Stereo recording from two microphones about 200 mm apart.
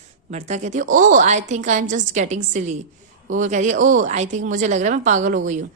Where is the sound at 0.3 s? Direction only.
35° right (ahead or behind).